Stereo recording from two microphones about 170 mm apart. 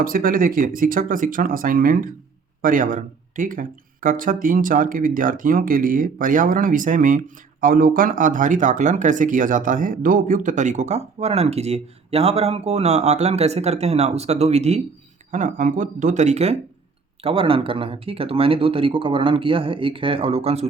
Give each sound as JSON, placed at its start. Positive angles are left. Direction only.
{"t": 0.0, "sound": "speech", "side_deg": -55}